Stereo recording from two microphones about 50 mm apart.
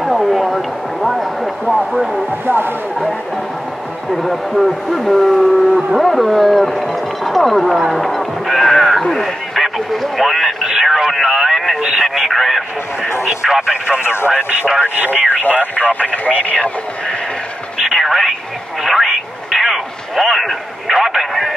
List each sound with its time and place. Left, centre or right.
0.0 s a sound: centre
2.4 s speech: right
4.1 s speech: centre
9.6 s radio: centre
11.8 s speech: centre
14.0 s speech: left
15.6 s speech: left
17.7 s a sound: centre